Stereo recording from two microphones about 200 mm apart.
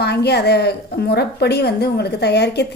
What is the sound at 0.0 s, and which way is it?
A woman's voice, 55° left (ahead or behind).